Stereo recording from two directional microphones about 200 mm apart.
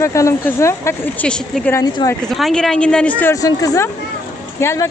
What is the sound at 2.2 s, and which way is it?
A woman's voice, centre (ahead or behind).